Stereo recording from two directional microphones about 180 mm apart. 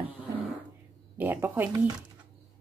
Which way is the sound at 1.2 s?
10° right (ahead or behind).